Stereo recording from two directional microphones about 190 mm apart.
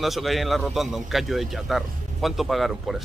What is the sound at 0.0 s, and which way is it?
A man's voice, centre (ahead or behind).